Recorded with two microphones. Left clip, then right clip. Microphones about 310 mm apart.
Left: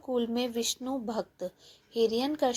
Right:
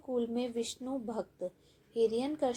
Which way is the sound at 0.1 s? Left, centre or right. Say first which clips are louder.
Left 4 dB; left.